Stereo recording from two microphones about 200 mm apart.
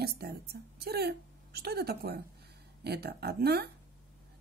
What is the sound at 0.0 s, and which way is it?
A woman's voice, 55° right (ahead or behind).